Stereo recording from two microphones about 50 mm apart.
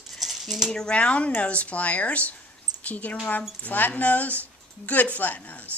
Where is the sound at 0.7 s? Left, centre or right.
Centre; by 5.7 s left.